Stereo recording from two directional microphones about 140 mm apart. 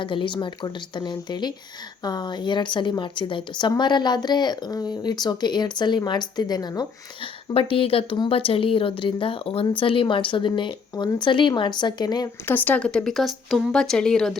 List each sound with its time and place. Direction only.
0.0 s speech: 35° left (ahead or behind)
7.5 s speech: 40° left (ahead or behind)
12.5 s speech: 10° left (ahead or behind)